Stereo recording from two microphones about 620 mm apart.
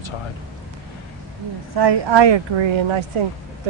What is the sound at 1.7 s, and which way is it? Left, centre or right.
A woman's voice, right.